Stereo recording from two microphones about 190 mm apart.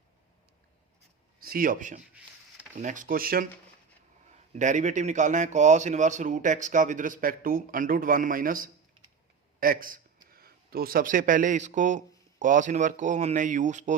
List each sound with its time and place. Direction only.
1.4 s speech: 50° right (ahead or behind)
4.3 s a man's voice: 40° right (ahead or behind)